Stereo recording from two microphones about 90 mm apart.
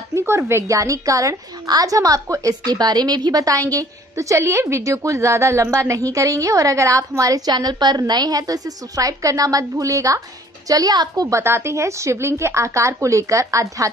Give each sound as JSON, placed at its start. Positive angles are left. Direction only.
{"t": 0.1, "sound": "a woman's voice", "side_deg": -30}
{"t": 2.7, "sound": "a woman's voice", "side_deg": -50}